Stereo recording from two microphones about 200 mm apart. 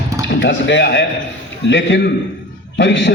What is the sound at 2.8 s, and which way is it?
Speech, 60° left (ahead or behind).